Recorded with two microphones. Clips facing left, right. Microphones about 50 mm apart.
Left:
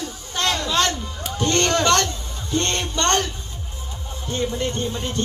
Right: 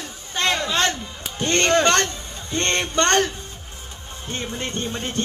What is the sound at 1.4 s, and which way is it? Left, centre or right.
Music, right.